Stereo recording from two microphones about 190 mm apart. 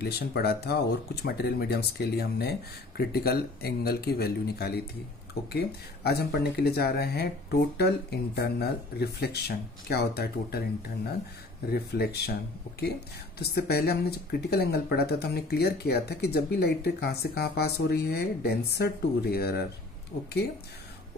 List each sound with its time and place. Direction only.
0.0 s speech: 55° left (ahead or behind)
11.7 s speech: 55° left (ahead or behind)
13.4 s speech: 55° left (ahead or behind)